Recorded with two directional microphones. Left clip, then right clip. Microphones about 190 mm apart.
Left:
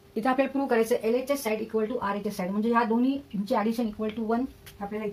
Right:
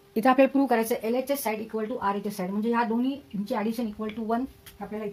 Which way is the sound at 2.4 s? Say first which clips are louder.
Left 1 dB; 35° right (ahead or behind).